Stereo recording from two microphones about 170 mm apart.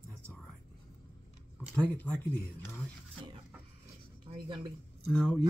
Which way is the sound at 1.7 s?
10° left (ahead or behind).